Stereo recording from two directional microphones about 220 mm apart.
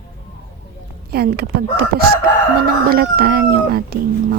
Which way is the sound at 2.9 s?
45° right (ahead or behind).